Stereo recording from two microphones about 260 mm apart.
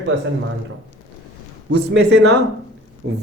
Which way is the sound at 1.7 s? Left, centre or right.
Right.